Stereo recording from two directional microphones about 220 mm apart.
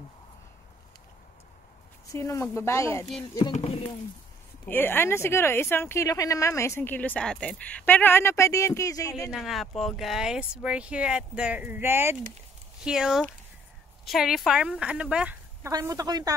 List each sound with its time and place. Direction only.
2.1 s speech: 15° left (ahead or behind)
3.5 s speech: 25° left (ahead or behind)
4.6 s speech: 10° left (ahead or behind)
9.3 s speech: centre (ahead or behind)
15.7 s speech: 15° right (ahead or behind)